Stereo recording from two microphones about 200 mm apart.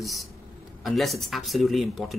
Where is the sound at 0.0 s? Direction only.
Centre (ahead or behind).